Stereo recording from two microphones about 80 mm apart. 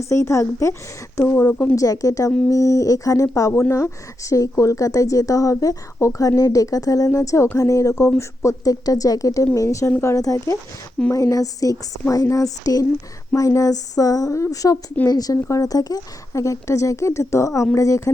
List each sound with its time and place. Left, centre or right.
0.0 s speech: left
1.7 s speech: left